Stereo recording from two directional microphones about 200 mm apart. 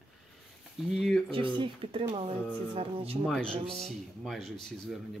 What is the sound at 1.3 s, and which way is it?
Speech, 25° right (ahead or behind).